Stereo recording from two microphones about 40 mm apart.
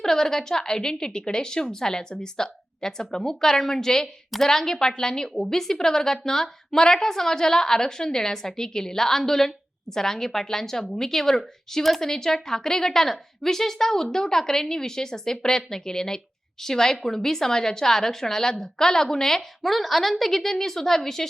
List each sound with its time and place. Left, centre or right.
0.0 s a woman's voice: centre